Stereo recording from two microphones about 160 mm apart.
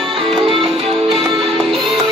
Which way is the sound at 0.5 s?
35° right (ahead or behind).